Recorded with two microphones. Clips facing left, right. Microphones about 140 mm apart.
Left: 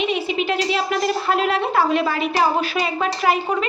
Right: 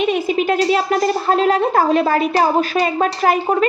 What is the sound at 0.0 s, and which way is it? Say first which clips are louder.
A woman's voice: right 5 dB; 45° right (ahead or behind).